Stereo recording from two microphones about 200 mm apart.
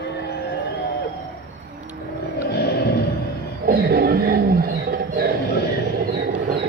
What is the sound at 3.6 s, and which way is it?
Roaring cats, 50° right (ahead or behind).